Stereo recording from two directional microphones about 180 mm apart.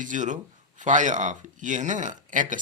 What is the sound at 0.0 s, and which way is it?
Speech, 45° right (ahead or behind).